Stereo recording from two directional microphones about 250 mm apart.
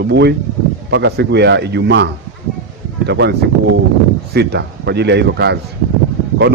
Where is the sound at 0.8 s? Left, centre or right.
Right.